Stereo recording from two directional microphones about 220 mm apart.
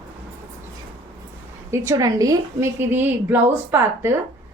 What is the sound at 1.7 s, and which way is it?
A woman's voice, 15° right (ahead or behind).